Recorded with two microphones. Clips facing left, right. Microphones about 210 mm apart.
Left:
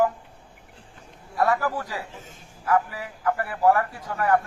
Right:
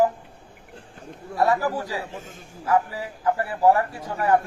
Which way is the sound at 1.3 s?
25° right (ahead or behind).